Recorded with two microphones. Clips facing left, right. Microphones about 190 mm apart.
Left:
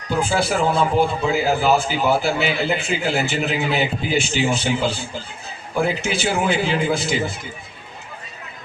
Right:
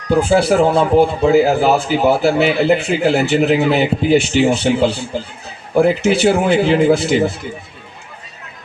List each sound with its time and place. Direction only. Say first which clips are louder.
0.1 s a man's voice: right 8 dB; 65° right (ahead or behind)